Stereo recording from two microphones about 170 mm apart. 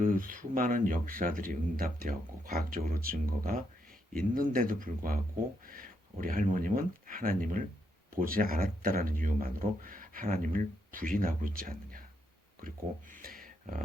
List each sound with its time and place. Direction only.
0.0 s speech: 55° right (ahead or behind)